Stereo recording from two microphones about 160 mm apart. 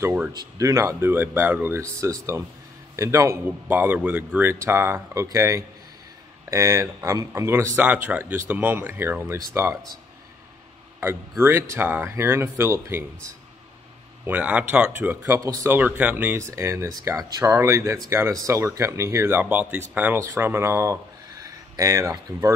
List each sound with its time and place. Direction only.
0.0 s speech: 10° right (ahead or behind)
0.3 s speech: 25° right (ahead or behind)
11.0 s speech: 15° right (ahead or behind)
14.2 s speech: 10° right (ahead or behind)